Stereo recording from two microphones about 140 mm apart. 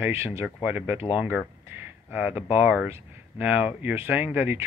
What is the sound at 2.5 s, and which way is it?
Speech, 10° right (ahead or behind).